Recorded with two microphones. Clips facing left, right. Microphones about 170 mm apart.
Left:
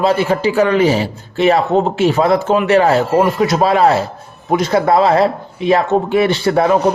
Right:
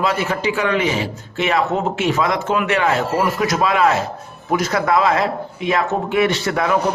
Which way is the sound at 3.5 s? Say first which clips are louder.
Left 4 dB; 35° left (ahead or behind).